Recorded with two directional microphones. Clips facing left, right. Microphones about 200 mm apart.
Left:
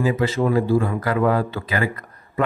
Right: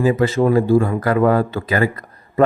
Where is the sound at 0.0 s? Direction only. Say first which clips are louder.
Right 4 dB; 45° right (ahead or behind).